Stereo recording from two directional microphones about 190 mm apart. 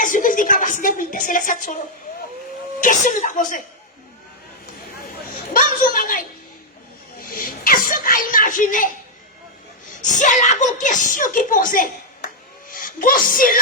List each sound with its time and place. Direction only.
0.0 s a sound: 45° left (ahead or behind)
1.3 s speech: 45° left (ahead or behind)
2.8 s speech: 45° left (ahead or behind)
5.3 s a woman's voice: 45° left (ahead or behind)
7.2 s whimper: 50° left (ahead or behind)
10.0 s speech: 40° left (ahead or behind)